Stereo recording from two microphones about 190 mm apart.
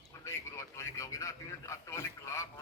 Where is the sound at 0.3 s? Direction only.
15° left (ahead or behind).